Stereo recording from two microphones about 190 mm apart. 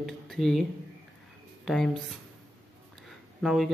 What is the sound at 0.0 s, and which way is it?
Speech, centre (ahead or behind).